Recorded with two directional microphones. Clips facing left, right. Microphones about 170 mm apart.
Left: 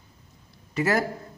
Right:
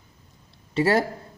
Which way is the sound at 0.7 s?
30° right (ahead or behind).